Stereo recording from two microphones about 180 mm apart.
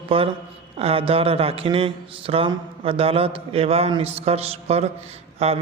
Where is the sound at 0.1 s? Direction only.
30° right (ahead or behind).